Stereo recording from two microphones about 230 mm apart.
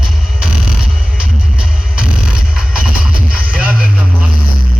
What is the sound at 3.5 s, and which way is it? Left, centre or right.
Music, centre.